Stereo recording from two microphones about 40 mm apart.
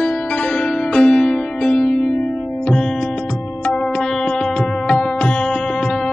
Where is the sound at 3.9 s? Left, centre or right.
Centre.